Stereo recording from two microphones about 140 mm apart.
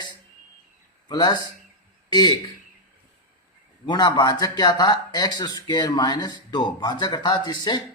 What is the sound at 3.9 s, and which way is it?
A man's voice, 30° left (ahead or behind).